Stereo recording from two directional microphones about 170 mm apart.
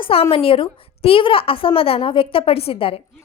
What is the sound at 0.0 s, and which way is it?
A woman's voice, 35° left (ahead or behind).